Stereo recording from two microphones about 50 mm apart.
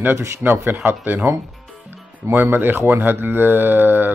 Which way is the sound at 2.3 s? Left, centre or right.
Right.